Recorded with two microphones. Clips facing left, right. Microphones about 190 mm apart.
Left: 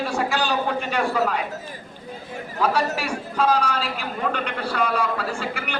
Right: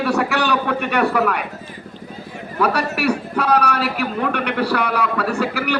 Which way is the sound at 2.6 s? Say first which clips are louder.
Right 3 dB; 65° right (ahead or behind).